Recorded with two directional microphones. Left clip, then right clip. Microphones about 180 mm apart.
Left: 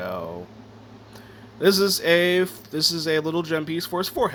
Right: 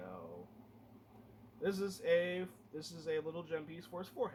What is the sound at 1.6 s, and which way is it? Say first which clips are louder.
Speech: left 17 dB; 50° left (ahead or behind).